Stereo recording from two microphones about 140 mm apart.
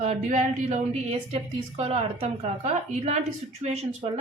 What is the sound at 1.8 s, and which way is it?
Speech, 45° right (ahead or behind).